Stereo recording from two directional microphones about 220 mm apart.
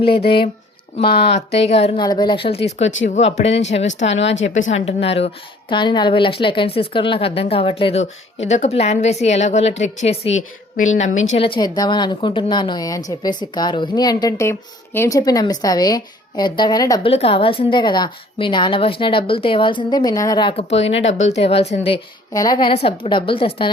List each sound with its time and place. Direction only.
0.3 s a woman's voice: 25° left (ahead or behind)